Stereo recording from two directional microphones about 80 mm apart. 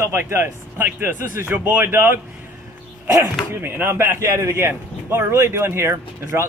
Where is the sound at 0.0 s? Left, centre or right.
Right.